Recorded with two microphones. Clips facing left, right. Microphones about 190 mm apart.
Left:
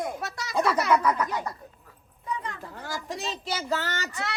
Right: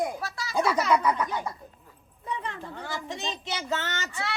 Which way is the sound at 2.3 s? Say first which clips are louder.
Even; 25° right (ahead or behind).